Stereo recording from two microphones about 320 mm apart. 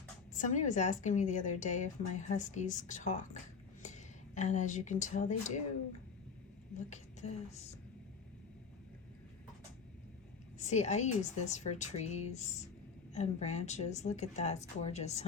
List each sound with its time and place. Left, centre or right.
0.3 s a woman's voice: left
6.7 s a woman's voice: left
10.6 s a woman's voice: left